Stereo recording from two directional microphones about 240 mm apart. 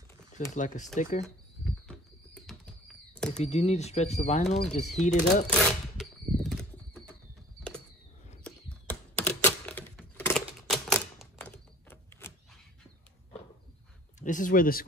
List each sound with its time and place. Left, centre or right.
0.6 s speech: left
1.2 s a sound: centre
3.3 s speech: left
5.5 s a sound: centre
8.5 s typing: centre
14.2 s speech: left